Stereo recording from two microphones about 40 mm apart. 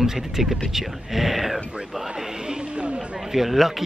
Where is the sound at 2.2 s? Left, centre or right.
Centre.